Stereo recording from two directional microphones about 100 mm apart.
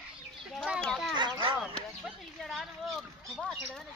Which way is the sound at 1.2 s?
55° right (ahead or behind).